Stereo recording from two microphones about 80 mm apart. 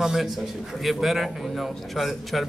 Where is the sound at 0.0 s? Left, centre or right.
Centre.